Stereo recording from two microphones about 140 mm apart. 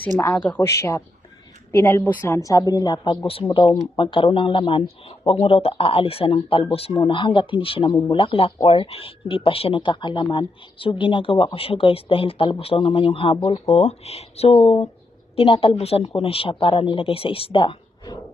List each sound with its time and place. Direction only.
0.2 s a woman's voice: 15° left (ahead or behind); by 18.2 s 35° left (ahead or behind)